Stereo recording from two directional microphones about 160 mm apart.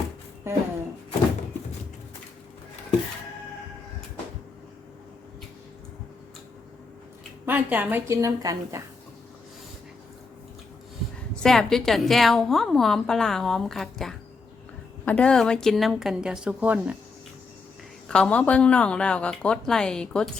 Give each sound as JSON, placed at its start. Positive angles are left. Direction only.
{"t": 0.4, "sound": "a sound", "side_deg": -15}
{"t": 7.4, "sound": "a woman's voice", "side_deg": -10}
{"t": 11.4, "sound": "a woman's voice", "side_deg": 0}
{"t": 18.1, "sound": "a woman's voice", "side_deg": 5}